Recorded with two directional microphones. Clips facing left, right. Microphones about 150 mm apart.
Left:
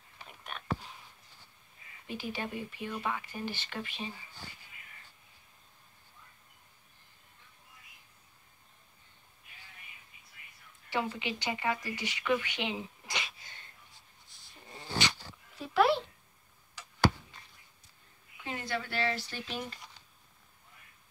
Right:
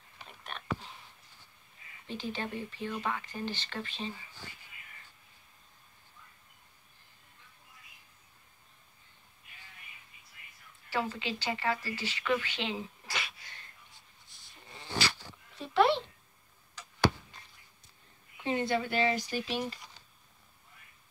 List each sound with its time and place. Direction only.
0.3 s whispering: 5° left (ahead or behind)
2.0 s speech: 10° left (ahead or behind)
10.9 s speech: 20° left (ahead or behind)
15.5 s a sound: 5° left (ahead or behind)
18.4 s speech: 25° right (ahead or behind); by 19.8 s 5° right (ahead or behind)